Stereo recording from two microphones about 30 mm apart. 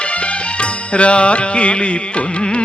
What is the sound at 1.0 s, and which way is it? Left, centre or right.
Carnatic music, left.